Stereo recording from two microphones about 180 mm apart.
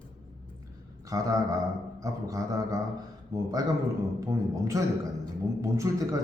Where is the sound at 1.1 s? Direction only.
20° right (ahead or behind).